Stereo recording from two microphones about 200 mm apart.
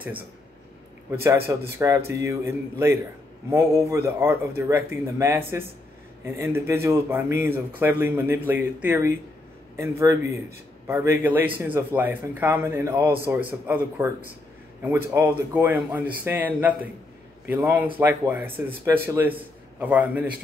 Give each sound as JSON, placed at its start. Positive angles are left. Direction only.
{"t": 1.2, "sound": "speech", "side_deg": -15}